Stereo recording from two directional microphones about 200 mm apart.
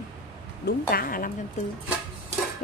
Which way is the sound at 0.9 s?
45° left (ahead or behind).